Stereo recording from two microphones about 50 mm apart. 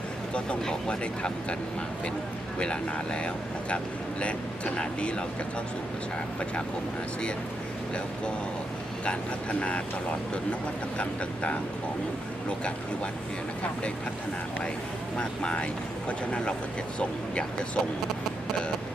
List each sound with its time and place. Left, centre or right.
0.3 s speech: centre
2.6 s speech: centre
9.6 s speech: left
15.2 s speech: left